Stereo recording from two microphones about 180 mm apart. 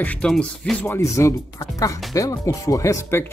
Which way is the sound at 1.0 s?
15° left (ahead or behind).